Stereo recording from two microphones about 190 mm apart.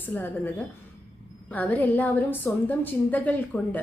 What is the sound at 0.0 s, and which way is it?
A woman's voice, 10° left (ahead or behind).